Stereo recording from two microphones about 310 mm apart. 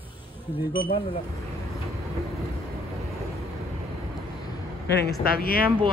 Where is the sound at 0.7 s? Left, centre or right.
Left.